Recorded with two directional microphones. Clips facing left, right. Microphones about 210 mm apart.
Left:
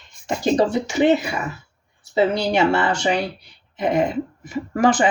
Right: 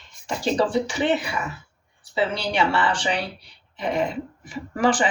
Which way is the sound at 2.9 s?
45° left (ahead or behind).